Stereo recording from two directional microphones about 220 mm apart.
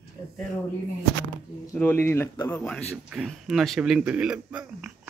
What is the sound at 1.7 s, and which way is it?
Speech, 10° left (ahead or behind).